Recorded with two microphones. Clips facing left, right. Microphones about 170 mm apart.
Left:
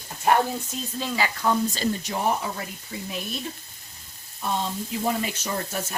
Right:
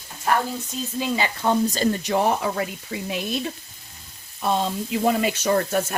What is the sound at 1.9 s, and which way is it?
Speech, 75° right (ahead or behind).